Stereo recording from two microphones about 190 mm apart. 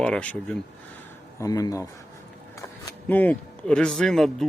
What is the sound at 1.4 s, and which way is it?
Speech, 20° left (ahead or behind).